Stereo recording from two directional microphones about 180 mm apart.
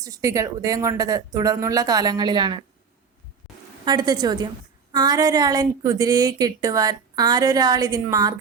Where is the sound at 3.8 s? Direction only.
25° right (ahead or behind).